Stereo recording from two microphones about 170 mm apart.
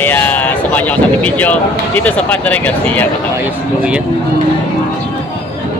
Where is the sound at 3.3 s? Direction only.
5° right (ahead or behind).